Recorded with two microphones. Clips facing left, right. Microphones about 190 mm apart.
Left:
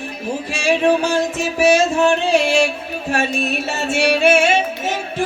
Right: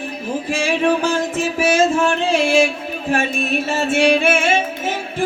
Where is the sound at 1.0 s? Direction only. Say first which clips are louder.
Even; 50° right (ahead or behind).